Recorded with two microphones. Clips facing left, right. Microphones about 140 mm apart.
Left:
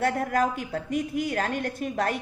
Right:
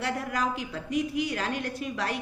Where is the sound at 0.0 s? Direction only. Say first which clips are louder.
Left 5 dB; 50° left (ahead or behind).